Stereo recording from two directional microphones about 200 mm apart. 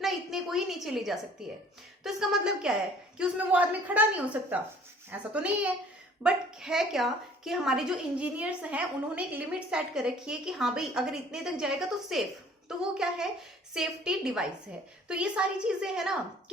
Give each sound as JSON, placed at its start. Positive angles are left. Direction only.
{"t": 0.0, "sound": "a woman's voice", "side_deg": 0}
{"t": 5.1, "sound": "a woman's voice", "side_deg": -5}